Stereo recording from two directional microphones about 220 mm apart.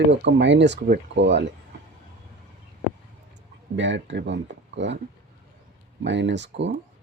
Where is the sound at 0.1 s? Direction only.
55° right (ahead or behind).